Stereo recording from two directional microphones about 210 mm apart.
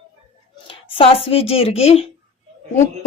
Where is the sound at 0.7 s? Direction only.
25° left (ahead or behind).